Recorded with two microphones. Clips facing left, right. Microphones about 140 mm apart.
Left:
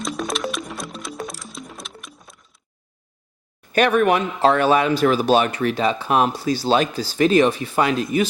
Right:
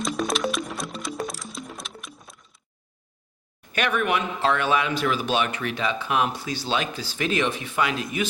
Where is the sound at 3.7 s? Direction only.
40° left (ahead or behind).